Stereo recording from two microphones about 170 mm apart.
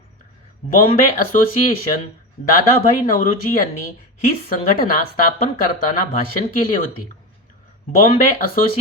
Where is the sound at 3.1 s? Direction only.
55° left (ahead or behind).